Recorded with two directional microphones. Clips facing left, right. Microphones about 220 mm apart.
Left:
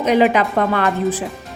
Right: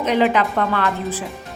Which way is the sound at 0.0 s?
10° left (ahead or behind).